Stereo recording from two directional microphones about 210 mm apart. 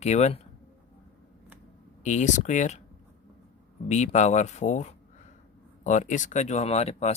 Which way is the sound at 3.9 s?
35° left (ahead or behind).